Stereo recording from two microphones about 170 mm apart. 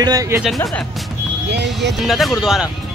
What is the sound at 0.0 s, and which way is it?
Speech, 20° right (ahead or behind).